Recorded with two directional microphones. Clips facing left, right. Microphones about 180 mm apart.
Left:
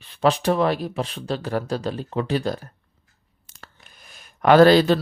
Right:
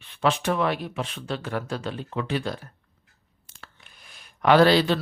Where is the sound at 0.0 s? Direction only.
35° left (ahead or behind).